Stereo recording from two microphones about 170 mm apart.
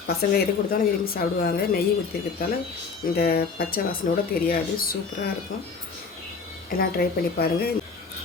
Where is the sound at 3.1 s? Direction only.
65° left (ahead or behind).